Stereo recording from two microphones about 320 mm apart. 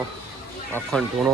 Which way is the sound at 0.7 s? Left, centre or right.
Centre.